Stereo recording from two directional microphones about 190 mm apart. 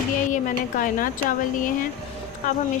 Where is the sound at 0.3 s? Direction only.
45° left (ahead or behind).